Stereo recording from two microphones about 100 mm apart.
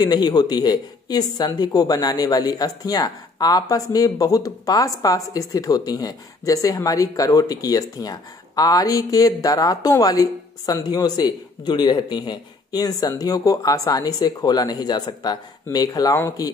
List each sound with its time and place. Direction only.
0.0 s speech: 45° left (ahead or behind)